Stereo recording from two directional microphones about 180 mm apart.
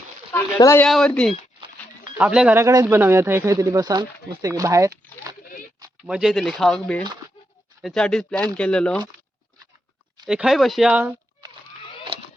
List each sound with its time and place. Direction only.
0.3 s speech: 15° left (ahead or behind)
2.1 s speech: 5° right (ahead or behind)
6.1 s speech: 5° right (ahead or behind)
10.2 s speech: 5° right (ahead or behind)